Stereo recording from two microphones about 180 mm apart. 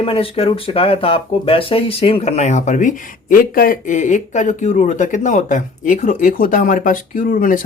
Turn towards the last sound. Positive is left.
turn(degrees=50)  # may be behind; listen again after turning